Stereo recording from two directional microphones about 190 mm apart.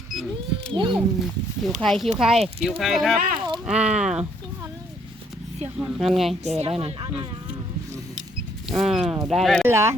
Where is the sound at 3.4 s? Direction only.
25° right (ahead or behind).